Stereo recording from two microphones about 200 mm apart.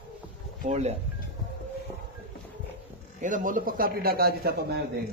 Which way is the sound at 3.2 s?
40° right (ahead or behind).